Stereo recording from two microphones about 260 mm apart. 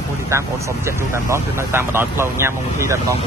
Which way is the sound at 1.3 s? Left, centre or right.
Centre.